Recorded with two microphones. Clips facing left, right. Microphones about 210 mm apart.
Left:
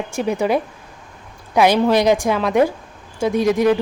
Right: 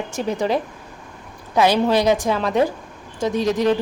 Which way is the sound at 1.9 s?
15° left (ahead or behind).